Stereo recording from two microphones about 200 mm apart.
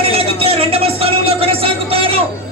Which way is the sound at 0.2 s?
30° right (ahead or behind).